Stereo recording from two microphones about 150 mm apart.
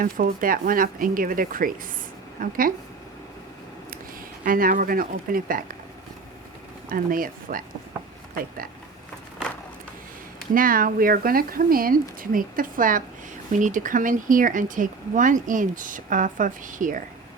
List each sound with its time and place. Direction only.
0.0 s speech: 65° right (ahead or behind)
4.4 s speech: 70° right (ahead or behind)
6.8 s speech: 70° right (ahead or behind)
10.5 s speech: 70° right (ahead or behind)